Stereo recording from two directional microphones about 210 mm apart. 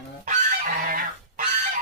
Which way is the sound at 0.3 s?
40° right (ahead or behind).